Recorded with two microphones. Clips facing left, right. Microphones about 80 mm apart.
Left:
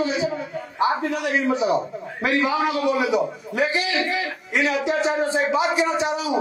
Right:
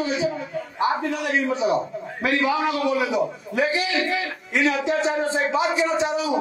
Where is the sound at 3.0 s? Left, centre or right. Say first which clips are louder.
Left 1 dB; centre.